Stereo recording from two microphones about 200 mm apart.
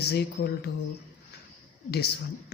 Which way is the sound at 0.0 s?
55° left (ahead or behind).